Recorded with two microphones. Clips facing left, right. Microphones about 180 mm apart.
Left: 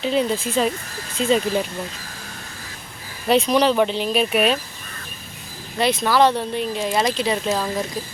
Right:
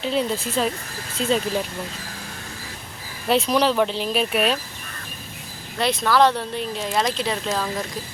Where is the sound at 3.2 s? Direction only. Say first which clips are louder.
Left 2 dB; centre (ahead or behind).